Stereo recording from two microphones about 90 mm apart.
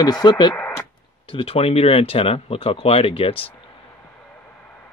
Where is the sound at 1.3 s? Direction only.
90° left.